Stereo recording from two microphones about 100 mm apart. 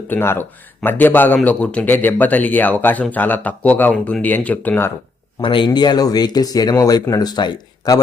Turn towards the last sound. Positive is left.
turn(degrees=45)  # may be behind; listen again after turning